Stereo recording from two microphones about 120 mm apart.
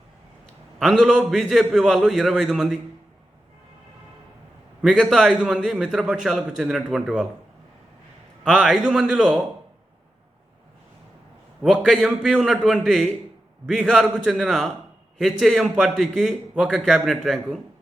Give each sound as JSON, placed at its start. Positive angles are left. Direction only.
{"t": 0.8, "sound": "a man's voice", "side_deg": -5}
{"t": 4.8, "sound": "a man's voice", "side_deg": -5}
{"t": 8.4, "sound": "a man's voice", "side_deg": -5}
{"t": 11.6, "sound": "a man's voice", "side_deg": -5}